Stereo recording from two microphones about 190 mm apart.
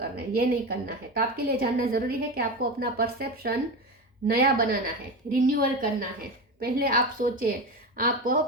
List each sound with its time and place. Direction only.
0.2 s a woman's voice: 55° right (ahead or behind)